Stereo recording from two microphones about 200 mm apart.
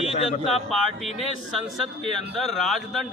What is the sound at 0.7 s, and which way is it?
A man's voice, centre (ahead or behind).